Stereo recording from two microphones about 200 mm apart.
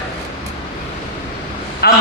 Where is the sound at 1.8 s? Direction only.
50° left (ahead or behind).